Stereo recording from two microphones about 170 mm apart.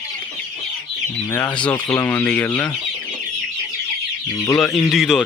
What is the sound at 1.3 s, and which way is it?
Speech, 10° left (ahead or behind).